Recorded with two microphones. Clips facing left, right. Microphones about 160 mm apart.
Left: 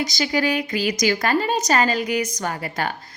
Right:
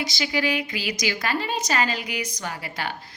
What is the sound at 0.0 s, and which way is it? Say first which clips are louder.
A woman's voice: left 4 dB; 45° left (ahead or behind).